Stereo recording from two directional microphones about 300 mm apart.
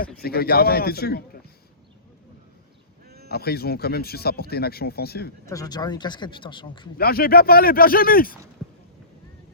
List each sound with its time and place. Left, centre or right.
0.2 s speech: left
3.2 s speech: left
5.5 s speech: centre
6.9 s speech: left